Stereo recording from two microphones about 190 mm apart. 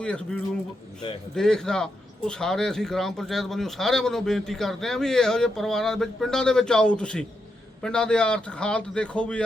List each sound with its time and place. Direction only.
0.0 s speech: 5° left (ahead or behind)